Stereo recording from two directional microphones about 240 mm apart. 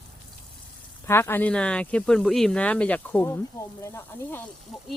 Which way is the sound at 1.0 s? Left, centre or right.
Centre.